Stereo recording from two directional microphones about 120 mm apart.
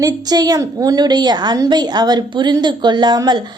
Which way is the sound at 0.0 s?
30° right (ahead or behind).